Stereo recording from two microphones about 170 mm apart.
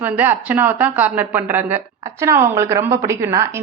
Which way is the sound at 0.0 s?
10° right (ahead or behind).